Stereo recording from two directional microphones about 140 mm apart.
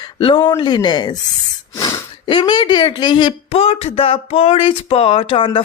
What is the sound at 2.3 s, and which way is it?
Speech, 35° left (ahead or behind).